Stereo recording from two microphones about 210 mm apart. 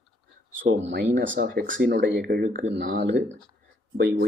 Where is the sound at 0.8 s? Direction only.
60° right (ahead or behind).